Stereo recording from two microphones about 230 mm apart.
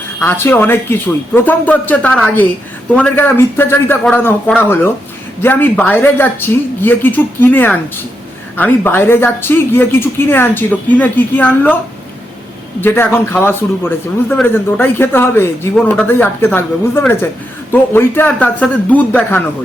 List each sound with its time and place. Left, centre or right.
0.2 s a man's voice: centre
12.8 s a man's voice: centre